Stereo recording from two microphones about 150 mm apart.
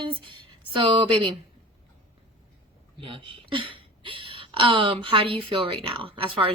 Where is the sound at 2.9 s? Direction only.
35° right (ahead or behind).